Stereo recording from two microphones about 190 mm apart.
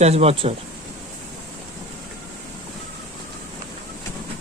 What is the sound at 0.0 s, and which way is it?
Speech, 35° right (ahead or behind).